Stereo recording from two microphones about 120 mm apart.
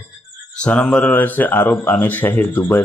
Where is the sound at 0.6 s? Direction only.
10° left (ahead or behind).